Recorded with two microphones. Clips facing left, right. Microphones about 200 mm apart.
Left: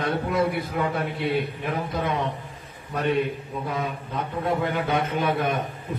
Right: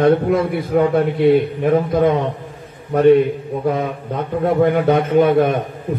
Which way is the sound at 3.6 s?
55° right (ahead or behind).